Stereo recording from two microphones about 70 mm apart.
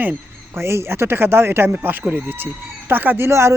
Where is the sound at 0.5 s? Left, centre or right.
Right.